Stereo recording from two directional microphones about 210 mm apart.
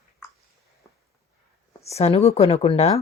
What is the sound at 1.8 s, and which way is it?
Speech, 30° left (ahead or behind).